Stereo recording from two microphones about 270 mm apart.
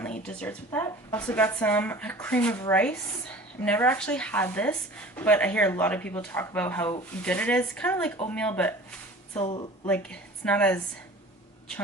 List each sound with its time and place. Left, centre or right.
0.0 s speech: centre
9.4 s a woman's voice: centre
9.8 s a woman's voice: centre